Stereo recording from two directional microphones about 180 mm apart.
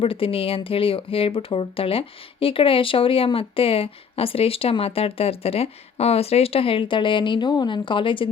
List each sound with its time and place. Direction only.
0.0 s speech: 30° left (ahead or behind)